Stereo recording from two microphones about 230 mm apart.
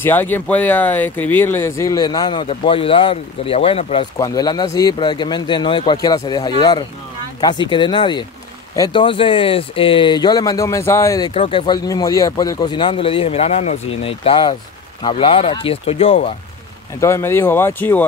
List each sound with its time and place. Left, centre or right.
0.0 s speech: centre; by 16.3 s left
17.0 s speech: centre